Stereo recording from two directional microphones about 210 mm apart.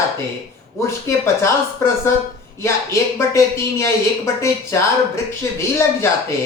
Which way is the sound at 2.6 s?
15° left (ahead or behind).